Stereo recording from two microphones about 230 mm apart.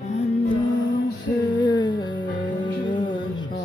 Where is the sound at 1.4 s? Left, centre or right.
Centre.